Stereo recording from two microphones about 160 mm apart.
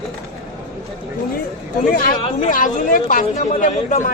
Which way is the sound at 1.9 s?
60° left (ahead or behind).